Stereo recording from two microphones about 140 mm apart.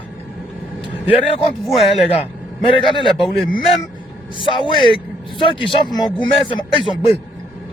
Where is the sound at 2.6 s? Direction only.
35° left (ahead or behind).